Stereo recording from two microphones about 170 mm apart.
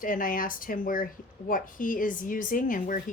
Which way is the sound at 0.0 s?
55° left (ahead or behind).